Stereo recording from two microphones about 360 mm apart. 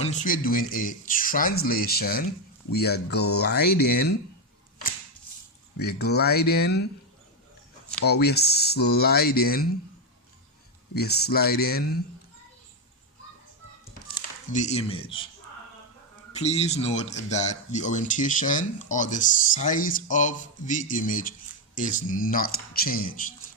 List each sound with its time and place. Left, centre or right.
0.0 s speech: centre
5.8 s speech: left
7.9 s speech: left
10.9 s speech: left
14.5 s speech: centre
16.3 s speech: centre